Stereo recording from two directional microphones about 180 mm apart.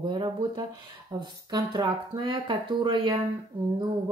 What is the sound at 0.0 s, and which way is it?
Speech, 25° right (ahead or behind).